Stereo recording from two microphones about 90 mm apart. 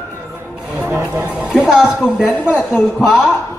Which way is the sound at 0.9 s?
25° right (ahead or behind).